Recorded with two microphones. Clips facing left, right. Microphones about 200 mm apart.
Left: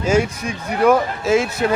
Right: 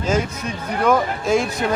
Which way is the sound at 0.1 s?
10° left (ahead or behind).